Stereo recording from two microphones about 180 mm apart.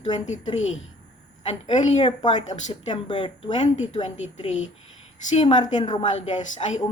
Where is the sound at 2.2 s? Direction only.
25° left (ahead or behind).